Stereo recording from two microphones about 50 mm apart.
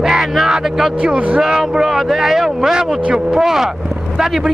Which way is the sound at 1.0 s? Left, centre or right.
Centre.